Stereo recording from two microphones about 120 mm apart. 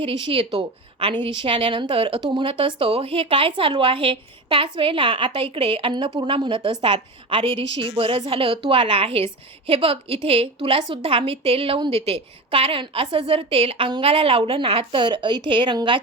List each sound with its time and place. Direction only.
0.0 s a woman's voice: 50° right (ahead or behind)